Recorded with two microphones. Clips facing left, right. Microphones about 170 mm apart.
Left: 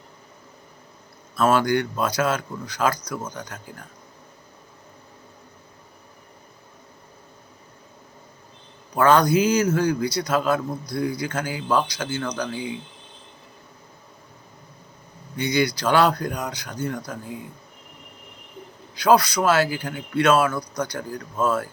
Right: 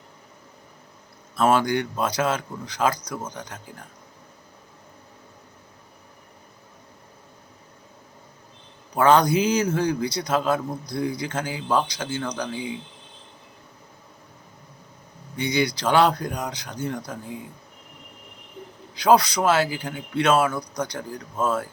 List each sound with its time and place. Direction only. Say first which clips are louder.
1.4 s a man's voice: left 1 dB; 20° right (ahead or behind)
9.0 s a man's voice: left 1 dB; 20° right (ahead or behind)
15.4 s a man's voice: left 1 dB; 20° right (ahead or behind)
18.9 s a man's voice: even; 25° right (ahead or behind)